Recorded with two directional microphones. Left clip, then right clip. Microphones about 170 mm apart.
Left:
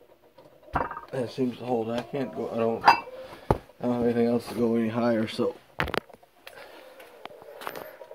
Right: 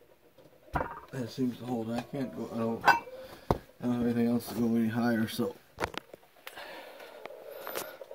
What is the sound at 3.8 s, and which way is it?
Speech, 60° right (ahead or behind).